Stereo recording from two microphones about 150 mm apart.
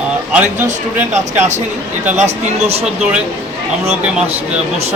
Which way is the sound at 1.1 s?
50° right (ahead or behind).